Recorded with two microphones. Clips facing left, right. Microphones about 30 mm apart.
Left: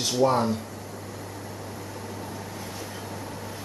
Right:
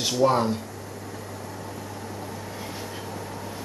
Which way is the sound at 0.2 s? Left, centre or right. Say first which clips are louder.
Right 1 dB; centre.